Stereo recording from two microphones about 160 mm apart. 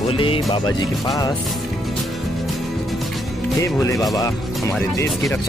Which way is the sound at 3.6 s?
20° left (ahead or behind).